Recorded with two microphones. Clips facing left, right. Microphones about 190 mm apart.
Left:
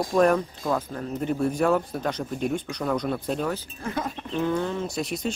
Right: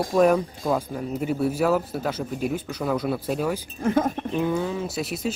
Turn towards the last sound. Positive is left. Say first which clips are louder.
# right 1 dB
turn(degrees=-5)  # may be behind; listen again after turning